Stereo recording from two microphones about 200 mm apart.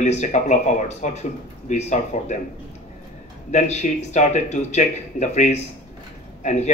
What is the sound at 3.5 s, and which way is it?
Speech, 35° left (ahead or behind).